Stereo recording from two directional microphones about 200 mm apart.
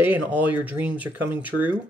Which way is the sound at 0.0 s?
10° right (ahead or behind).